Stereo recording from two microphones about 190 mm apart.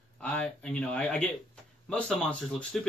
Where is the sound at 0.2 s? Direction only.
5° left (ahead or behind).